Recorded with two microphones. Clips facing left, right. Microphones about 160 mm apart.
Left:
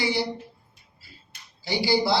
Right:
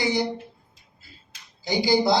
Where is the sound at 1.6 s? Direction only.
20° right (ahead or behind).